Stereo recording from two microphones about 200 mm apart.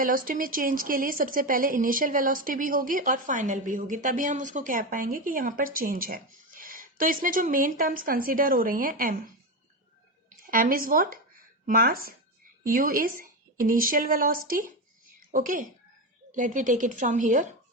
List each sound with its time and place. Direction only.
0.0 s a woman's voice: 45° right (ahead or behind)
10.2 s a sound: 45° right (ahead or behind)
12.6 s a woman's voice: 45° right (ahead or behind)